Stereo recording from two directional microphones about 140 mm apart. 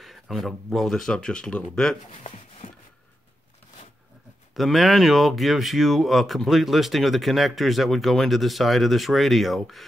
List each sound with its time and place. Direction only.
0.0 s speech: centre (ahead or behind)
2.2 s a sound: 45° left (ahead or behind)
4.6 s speech: centre (ahead or behind)